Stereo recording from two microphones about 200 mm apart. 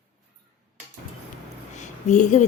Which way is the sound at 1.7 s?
35° left (ahead or behind).